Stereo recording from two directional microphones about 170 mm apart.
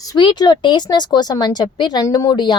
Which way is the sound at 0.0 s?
25° left (ahead or behind).